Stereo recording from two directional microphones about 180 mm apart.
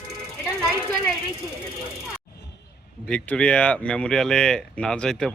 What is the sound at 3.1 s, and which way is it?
Speech, 5° left (ahead or behind).